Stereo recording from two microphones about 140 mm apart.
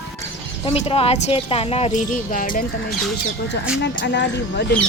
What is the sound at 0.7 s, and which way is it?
Speech, 45° left (ahead or behind).